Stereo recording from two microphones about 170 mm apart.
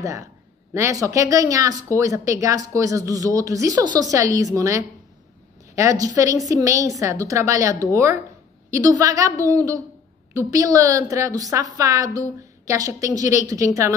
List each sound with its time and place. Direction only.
0.0 s a woman's voice: 20° right (ahead or behind)